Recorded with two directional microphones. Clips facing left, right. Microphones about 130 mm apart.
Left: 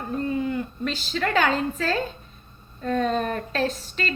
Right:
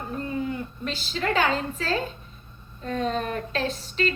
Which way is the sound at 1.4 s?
45° left (ahead or behind).